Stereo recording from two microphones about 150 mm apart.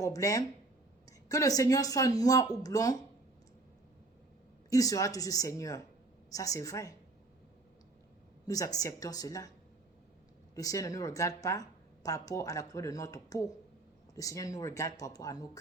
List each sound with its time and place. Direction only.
0.0 s speech: 20° left (ahead or behind)
4.7 s speech: 25° left (ahead or behind)
8.4 s speech: 25° left (ahead or behind)
10.5 s speech: 20° left (ahead or behind)